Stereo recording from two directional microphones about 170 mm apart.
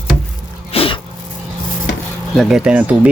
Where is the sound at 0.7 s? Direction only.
30° left (ahead or behind).